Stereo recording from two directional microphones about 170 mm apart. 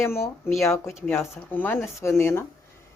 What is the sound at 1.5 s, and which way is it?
Speech, 10° left (ahead or behind).